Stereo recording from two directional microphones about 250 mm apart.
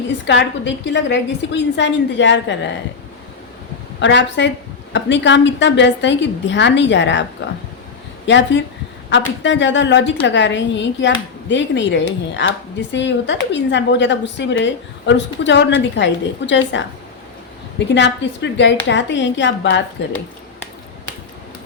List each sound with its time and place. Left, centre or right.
0.3 s a woman's voice: left
4.0 s a woman's voice: left
8.3 s a woman's voice: left